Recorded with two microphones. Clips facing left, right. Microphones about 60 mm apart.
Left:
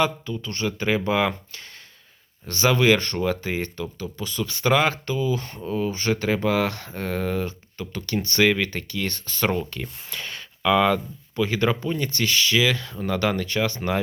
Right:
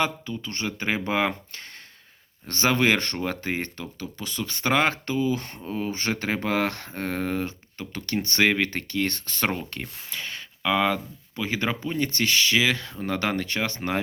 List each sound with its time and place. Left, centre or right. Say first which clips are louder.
0.0 s speech: left 3 dB; right
10.1 s speech: left 1 dB; centre
11.4 s speech: left 3 dB; right